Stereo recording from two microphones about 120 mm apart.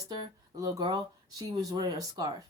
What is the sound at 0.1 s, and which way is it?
A woman's voice, 30° right (ahead or behind).